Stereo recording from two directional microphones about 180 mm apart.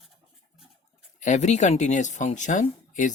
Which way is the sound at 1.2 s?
40° left (ahead or behind).